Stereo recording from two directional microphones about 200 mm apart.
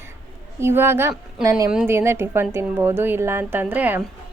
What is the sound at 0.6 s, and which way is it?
A woman's voice, 10° right (ahead or behind).